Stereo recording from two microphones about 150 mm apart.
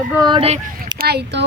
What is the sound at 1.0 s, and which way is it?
Speech, 90° right.